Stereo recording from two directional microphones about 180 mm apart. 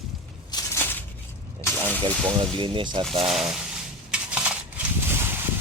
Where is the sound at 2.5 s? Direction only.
30° right (ahead or behind).